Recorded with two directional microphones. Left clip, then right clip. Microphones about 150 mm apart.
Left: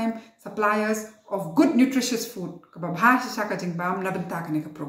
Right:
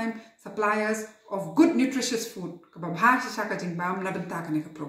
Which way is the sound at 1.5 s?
15° left (ahead or behind).